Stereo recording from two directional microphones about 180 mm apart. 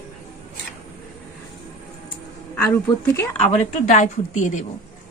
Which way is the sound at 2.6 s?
10° left (ahead or behind).